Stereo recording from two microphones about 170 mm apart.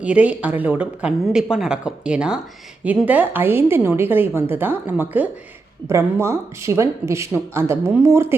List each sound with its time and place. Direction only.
0.0 s a woman's voice: 5° right (ahead or behind)